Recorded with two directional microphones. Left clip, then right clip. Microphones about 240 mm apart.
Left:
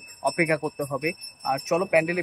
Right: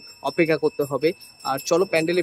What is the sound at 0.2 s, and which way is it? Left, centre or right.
Speech, centre.